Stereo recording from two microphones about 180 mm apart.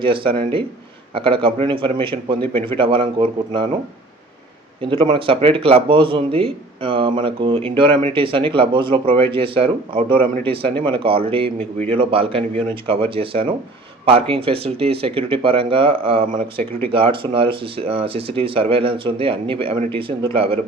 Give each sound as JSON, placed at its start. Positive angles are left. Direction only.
{"t": 0.0, "sound": "speech", "side_deg": -30}
{"t": 4.8, "sound": "speech", "side_deg": -30}